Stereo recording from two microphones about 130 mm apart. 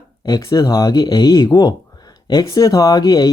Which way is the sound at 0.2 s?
30° left (ahead or behind).